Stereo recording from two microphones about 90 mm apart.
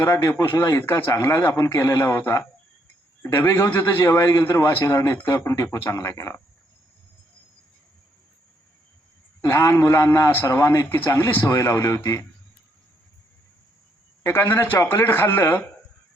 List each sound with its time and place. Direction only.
0.0 s a man's voice: 30° left (ahead or behind)
9.4 s a man's voice: 30° left (ahead or behind)
14.3 s speech: 25° left (ahead or behind)